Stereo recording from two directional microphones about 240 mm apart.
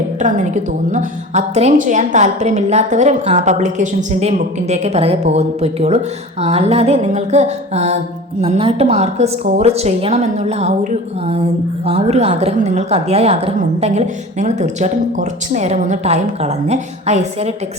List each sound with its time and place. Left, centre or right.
0.2 s a woman's voice: right
11.9 s a woman's voice: right